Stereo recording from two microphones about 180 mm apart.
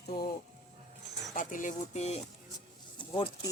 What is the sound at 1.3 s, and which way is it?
Speech, 45° left (ahead or behind).